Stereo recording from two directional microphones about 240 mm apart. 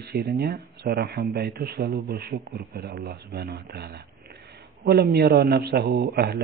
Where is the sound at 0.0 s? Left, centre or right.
Right.